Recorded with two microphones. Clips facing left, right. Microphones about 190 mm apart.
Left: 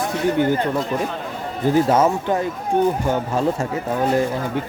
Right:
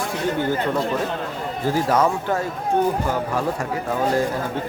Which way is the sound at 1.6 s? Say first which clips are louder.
Left 4 dB; 20° left (ahead or behind).